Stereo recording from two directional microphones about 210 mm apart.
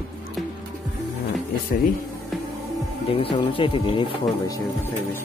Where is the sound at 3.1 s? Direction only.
25° left (ahead or behind).